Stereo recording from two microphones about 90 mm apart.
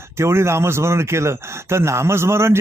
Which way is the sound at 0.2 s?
30° right (ahead or behind).